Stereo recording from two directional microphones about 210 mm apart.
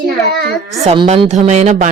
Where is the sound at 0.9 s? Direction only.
25° right (ahead or behind).